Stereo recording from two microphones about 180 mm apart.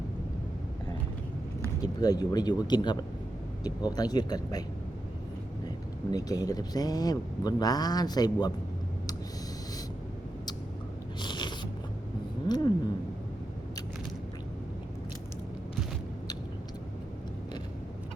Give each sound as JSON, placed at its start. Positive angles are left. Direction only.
{"t": 1.8, "sound": "speech", "side_deg": 20}
{"t": 5.6, "sound": "speech", "side_deg": 20}
{"t": 11.2, "sound": "biting", "side_deg": 25}
{"t": 12.5, "sound": "cat", "side_deg": 25}